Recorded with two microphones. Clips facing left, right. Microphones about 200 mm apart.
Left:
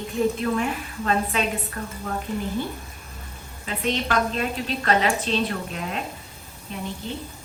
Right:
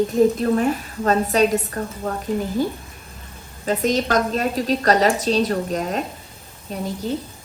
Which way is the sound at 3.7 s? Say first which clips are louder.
Right 6 dB; 40° right (ahead or behind).